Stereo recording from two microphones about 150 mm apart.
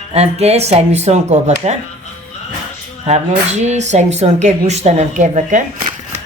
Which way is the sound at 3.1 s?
50° right (ahead or behind).